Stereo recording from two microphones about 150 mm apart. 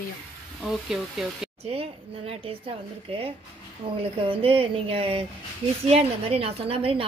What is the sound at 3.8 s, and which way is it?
A woman's voice, 35° right (ahead or behind).